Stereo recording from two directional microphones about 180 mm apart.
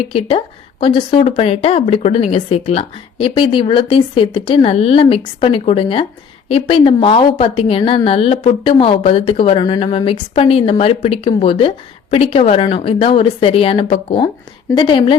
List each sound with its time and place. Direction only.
0.0 s a woman's voice: 30° left (ahead or behind)